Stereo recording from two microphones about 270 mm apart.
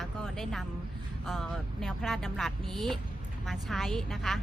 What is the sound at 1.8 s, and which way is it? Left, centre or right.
Speech, centre.